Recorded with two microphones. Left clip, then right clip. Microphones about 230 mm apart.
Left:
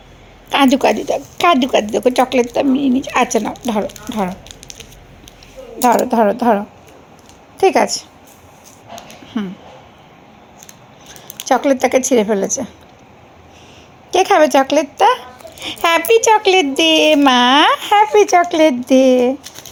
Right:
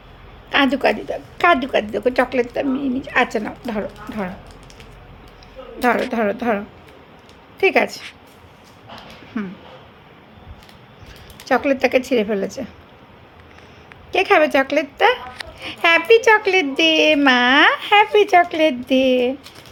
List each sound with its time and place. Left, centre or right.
0.5 s a woman's voice: left
5.8 s speech: centre
7.6 s speech: centre
9.3 s speech: centre
11.4 s speech: centre
14.1 s speech: centre